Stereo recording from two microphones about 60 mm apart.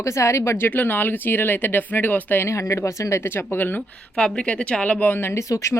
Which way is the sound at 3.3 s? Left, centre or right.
Left.